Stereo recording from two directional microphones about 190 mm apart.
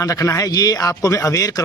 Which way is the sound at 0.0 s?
15° left (ahead or behind).